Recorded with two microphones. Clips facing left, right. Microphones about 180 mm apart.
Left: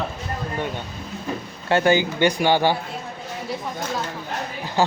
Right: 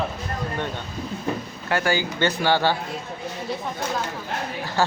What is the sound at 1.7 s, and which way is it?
Speech, 25° left (ahead or behind).